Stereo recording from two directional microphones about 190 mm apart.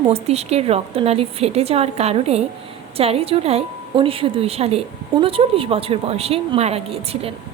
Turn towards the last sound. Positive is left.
turn(degrees=-30)  # may be behind; listen again after turning